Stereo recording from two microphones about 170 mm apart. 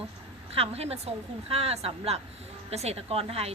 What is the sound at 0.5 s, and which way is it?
A woman's voice, 35° right (ahead or behind).